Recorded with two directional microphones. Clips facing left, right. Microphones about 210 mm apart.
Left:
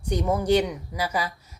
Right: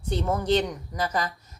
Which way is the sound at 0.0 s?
10° left (ahead or behind).